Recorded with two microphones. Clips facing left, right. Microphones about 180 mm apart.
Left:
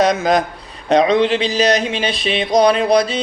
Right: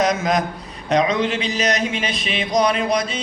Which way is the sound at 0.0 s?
35° left (ahead or behind).